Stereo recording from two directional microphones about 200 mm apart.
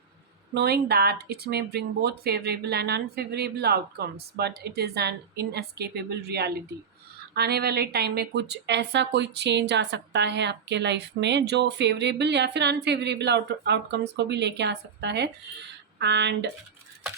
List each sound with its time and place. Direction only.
0.5 s speech: 55° right (ahead or behind)